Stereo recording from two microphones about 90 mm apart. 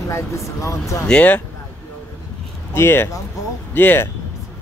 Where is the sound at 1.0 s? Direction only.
15° left (ahead or behind).